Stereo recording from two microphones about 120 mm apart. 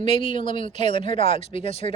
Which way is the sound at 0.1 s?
45° left (ahead or behind).